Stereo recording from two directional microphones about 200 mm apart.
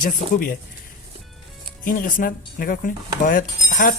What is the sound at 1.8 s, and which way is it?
Speech, 45° left (ahead or behind).